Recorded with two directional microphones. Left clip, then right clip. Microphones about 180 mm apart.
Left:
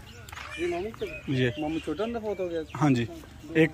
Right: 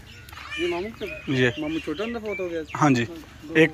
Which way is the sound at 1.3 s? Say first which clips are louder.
Right 6 dB; 10° left (ahead or behind).